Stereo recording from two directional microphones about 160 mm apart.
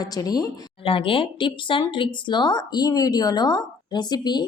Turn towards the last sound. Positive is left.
turn(degrees=25)  # may be behind; listen again after turning